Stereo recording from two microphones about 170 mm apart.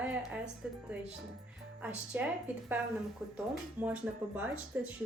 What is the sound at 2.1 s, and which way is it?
Speech, 10° right (ahead or behind).